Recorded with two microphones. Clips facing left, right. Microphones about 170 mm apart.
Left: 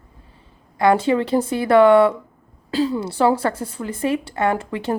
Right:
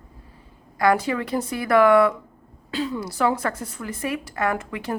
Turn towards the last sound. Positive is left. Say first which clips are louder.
# left 5 dB
turn(degrees=30)  # may be behind; listen again after turning